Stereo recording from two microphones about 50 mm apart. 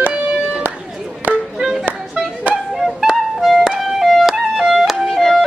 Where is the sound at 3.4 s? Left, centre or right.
Centre.